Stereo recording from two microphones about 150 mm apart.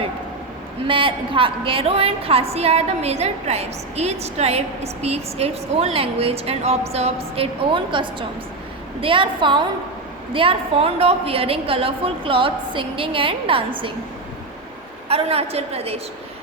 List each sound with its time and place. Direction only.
0.9 s a woman's voice: 35° right (ahead or behind)
15.1 s a woman's voice: 40° right (ahead or behind)